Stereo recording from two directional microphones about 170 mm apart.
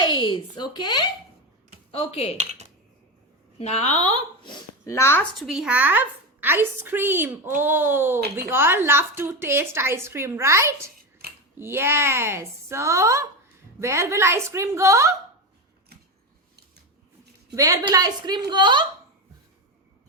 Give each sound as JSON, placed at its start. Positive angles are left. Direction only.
{"t": 0.0, "sound": "speech", "side_deg": 30}
{"t": 2.4, "sound": "speech", "side_deg": -40}
{"t": 3.6, "sound": "a woman's voice", "side_deg": 40}
{"t": 4.4, "sound": "speech", "side_deg": 20}
{"t": 5.4, "sound": "a woman's voice", "side_deg": 0}
{"t": 17.5, "sound": "a woman's voice", "side_deg": -20}